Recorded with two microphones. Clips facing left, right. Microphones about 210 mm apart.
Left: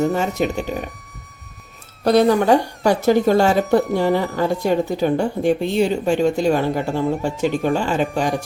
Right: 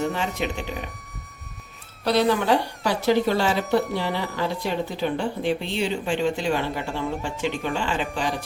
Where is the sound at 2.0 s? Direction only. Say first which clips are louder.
Left 6 dB; 45° left (ahead or behind).